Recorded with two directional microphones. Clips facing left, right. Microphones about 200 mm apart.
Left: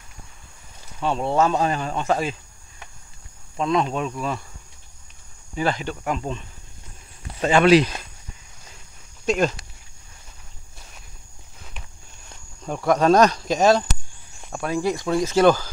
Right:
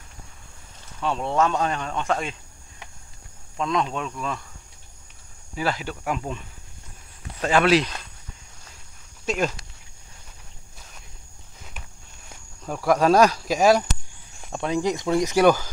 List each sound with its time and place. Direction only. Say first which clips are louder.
1.0 s a man's voice: left 2 dB; centre (ahead or behind)
3.5 s a man's voice: left 3 dB; 5° left (ahead or behind)
5.6 s a man's voice: left 3 dB; 5° right (ahead or behind)
9.2 s speech: left 4 dB; 5° right (ahead or behind)
12.3 s speech: left 2 dB; 5° right (ahead or behind)